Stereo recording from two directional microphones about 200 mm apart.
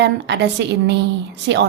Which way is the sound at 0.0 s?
60° right (ahead or behind).